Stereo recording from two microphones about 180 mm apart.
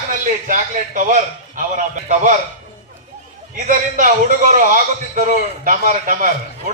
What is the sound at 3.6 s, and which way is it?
A man's voice, 45° right (ahead or behind).